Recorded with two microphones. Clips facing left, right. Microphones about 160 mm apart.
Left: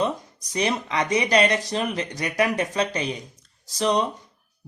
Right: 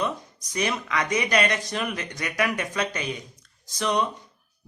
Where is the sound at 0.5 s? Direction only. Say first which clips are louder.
Left 2 dB; 30° left (ahead or behind).